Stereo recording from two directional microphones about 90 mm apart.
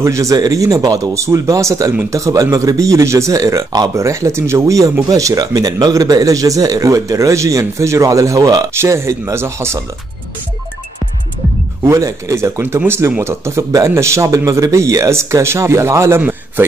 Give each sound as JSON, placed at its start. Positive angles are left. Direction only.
{"t": 0.0, "sound": "speech", "side_deg": -35}
{"t": 3.9, "sound": "speech", "side_deg": -35}
{"t": 8.9, "sound": "speech", "side_deg": -30}
{"t": 11.8, "sound": "speech", "side_deg": -35}
{"t": 16.2, "sound": "a sound", "side_deg": -20}